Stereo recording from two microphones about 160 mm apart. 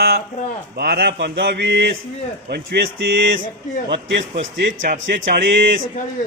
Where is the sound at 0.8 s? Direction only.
75° right (ahead or behind).